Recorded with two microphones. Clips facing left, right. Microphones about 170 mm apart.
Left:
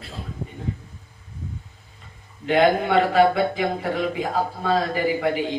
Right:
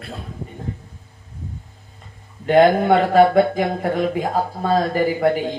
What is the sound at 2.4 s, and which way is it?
Speech, 45° right (ahead or behind).